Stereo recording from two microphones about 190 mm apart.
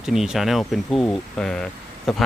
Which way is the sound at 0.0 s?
Centre (ahead or behind).